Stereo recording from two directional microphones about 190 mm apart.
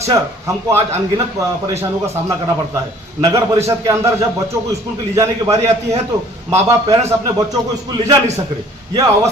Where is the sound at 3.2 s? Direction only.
20° right (ahead or behind).